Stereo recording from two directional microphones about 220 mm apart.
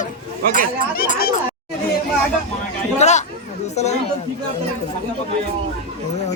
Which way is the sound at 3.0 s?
30° left (ahead or behind).